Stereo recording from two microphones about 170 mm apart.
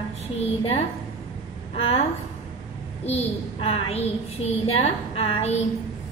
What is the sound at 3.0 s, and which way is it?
A woman's voice, 35° left (ahead or behind).